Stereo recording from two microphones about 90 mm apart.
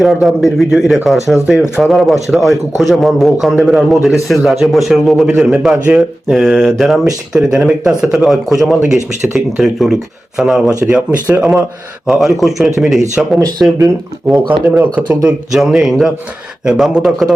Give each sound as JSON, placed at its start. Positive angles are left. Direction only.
{"t": 0.0, "sound": "a man's voice", "side_deg": 0}
{"t": 13.6, "sound": "speech", "side_deg": -20}
{"t": 14.3, "sound": "a man's voice", "side_deg": 0}
{"t": 15.5, "sound": "a man's voice", "side_deg": -5}